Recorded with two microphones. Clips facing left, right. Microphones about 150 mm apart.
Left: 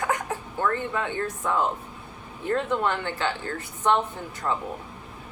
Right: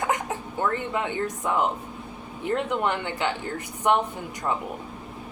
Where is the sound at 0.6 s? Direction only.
15° right (ahead or behind).